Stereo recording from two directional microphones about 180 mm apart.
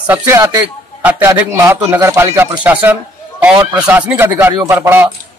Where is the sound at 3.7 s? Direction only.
10° right (ahead or behind).